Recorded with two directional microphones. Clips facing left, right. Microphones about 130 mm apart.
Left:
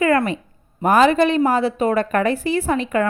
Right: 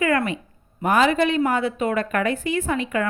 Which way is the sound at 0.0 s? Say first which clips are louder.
Left 4 dB; 35° left (ahead or behind).